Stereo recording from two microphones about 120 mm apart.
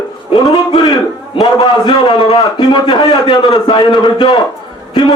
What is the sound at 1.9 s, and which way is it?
A man's voice, 50° left (ahead or behind).